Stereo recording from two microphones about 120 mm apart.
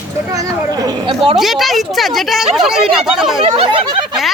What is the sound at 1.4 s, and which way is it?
Speech, centre (ahead or behind).